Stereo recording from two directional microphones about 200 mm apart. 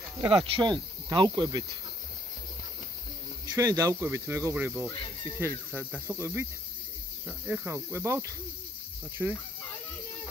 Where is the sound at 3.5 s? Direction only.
15° right (ahead or behind).